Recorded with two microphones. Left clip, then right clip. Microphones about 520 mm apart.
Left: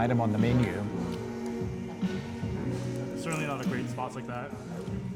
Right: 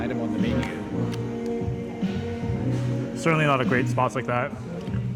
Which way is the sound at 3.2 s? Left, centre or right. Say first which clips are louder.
Right 14 dB; right.